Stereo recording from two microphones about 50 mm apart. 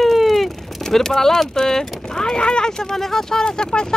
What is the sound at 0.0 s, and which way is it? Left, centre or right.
Speech, centre.